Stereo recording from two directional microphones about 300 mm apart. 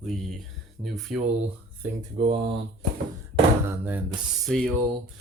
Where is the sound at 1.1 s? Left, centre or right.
Centre.